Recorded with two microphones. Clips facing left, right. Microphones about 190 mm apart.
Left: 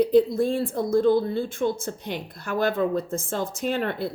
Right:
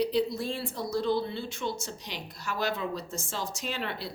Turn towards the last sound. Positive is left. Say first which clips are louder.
# left 9 dB
turn(degrees=50)  # may be behind; listen again after turning